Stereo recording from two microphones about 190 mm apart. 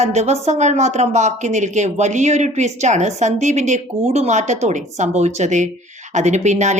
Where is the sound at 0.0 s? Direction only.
35° right (ahead or behind).